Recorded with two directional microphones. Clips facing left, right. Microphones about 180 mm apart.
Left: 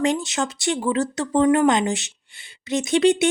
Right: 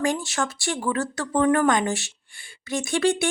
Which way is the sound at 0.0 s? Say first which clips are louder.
Left 3 dB; 20° left (ahead or behind).